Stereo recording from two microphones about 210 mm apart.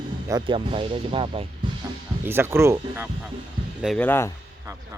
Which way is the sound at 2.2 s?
10° right (ahead or behind).